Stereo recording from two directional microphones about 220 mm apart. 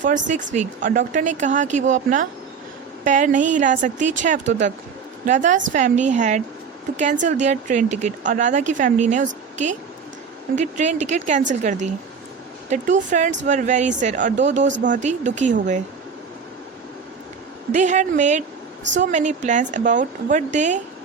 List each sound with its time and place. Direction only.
0.0 s speech: 35° right (ahead or behind)
17.7 s speech: 35° right (ahead or behind)